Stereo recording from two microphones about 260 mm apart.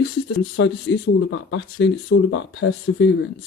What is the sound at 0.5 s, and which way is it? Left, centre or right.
Speech, left.